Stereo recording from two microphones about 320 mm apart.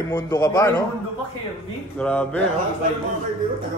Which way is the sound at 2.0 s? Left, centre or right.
Centre.